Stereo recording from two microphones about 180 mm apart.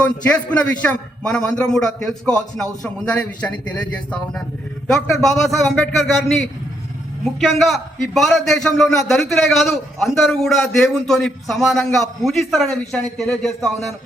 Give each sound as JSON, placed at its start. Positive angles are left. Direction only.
{"t": 0.0, "sound": "a man's voice", "side_deg": 5}